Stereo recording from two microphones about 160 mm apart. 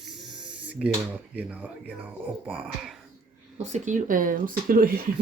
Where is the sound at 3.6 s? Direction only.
50° right (ahead or behind); by 5.0 s 65° right (ahead or behind).